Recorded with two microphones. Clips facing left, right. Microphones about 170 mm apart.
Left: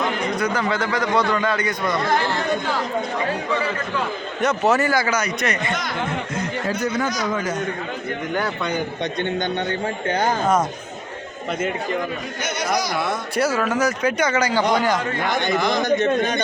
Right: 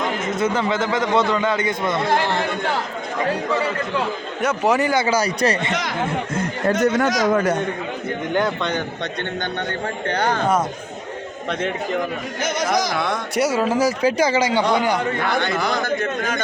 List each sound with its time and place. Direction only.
0.3 s a man's voice: 25° right (ahead or behind)
4.4 s a man's voice: 10° right (ahead or behind); by 5.7 s 30° right (ahead or behind)
6.7 s speech: 65° right (ahead or behind)
8.4 s a man's voice: 10° left (ahead or behind)
10.1 s a man's voice: 10° left (ahead or behind)
13.5 s a man's voice: 30° right (ahead or behind)
15.4 s a man's voice: 15° left (ahead or behind)